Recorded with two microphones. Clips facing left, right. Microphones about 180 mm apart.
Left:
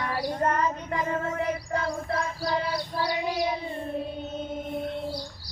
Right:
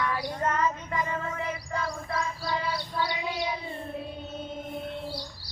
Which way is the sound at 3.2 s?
45° left (ahead or behind).